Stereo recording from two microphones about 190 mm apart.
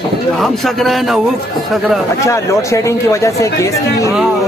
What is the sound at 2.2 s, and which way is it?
Speech, 15° left (ahead or behind).